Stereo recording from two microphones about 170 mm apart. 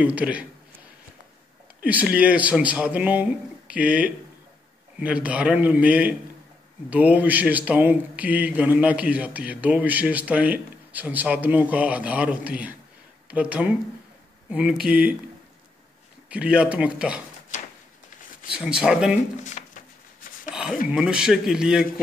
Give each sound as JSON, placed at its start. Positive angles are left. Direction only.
{"t": 0.0, "sound": "a man's voice", "side_deg": -10}
{"t": 16.3, "sound": "a man's voice", "side_deg": -5}
{"t": 18.5, "sound": "speech", "side_deg": -5}
{"t": 19.4, "sound": "a sound", "side_deg": 45}
{"t": 20.9, "sound": "speech", "side_deg": -5}